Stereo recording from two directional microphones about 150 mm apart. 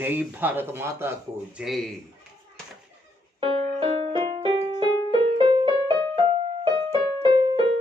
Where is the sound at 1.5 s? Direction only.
Centre (ahead or behind).